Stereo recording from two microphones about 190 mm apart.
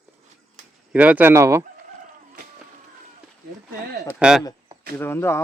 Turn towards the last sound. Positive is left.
turn(degrees=10)  # may be behind; listen again after turning